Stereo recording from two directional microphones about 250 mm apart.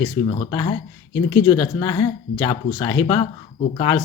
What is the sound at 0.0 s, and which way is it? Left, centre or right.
Speech, centre.